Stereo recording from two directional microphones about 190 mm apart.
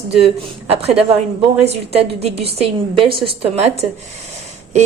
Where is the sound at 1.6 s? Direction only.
35° right (ahead or behind).